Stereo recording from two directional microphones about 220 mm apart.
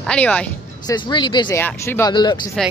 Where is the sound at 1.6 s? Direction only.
10° left (ahead or behind).